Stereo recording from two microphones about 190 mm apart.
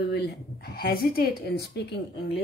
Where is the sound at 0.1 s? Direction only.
55° left (ahead or behind).